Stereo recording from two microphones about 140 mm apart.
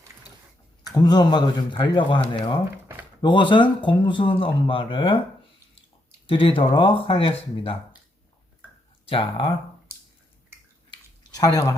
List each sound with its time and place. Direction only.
0.9 s speech: 30° left (ahead or behind)
6.2 s speech: 40° left (ahead or behind)
9.0 s speech: 40° left (ahead or behind)
11.2 s a sound: 25° left (ahead or behind)